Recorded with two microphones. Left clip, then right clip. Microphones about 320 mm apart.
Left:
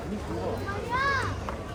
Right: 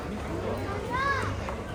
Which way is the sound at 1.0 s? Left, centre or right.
Centre.